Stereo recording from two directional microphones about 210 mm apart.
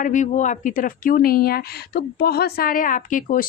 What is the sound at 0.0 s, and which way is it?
Speech, 35° left (ahead or behind).